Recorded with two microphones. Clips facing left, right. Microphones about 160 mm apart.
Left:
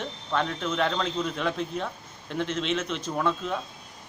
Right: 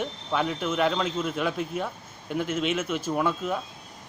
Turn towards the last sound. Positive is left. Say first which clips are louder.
# right 1 dB
turn(degrees=-5)  # may be behind; listen again after turning